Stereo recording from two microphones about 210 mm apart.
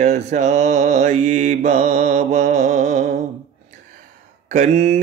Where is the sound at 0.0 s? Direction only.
35° right (ahead or behind).